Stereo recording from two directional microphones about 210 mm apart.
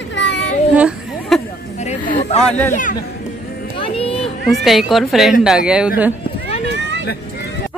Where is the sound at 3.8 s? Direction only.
25° left (ahead or behind).